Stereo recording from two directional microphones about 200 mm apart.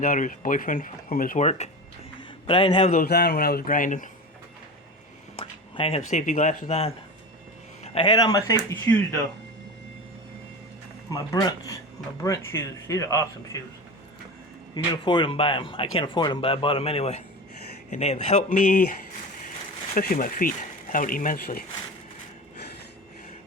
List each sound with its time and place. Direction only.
0.0 s speech: 40° left (ahead or behind)
2.9 s speech: 50° left (ahead or behind)
5.4 s a sound: 30° left (ahead or behind)
6.1 s speech: 40° left (ahead or behind)
7.9 s speech: 25° left (ahead or behind); by 9.0 s 10° left (ahead or behind)
11.1 s speech: 15° left (ahead or behind)
15.0 s speech: 25° left (ahead or behind); by 18.9 s 40° left (ahead or behind)
19.9 s speech: 45° left (ahead or behind)